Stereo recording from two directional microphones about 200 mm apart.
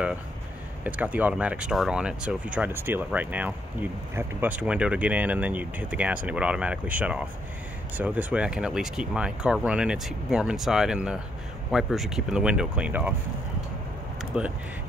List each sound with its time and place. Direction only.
0.8 s speech: 5° right (ahead or behind)
14.3 s speech: 5° right (ahead or behind)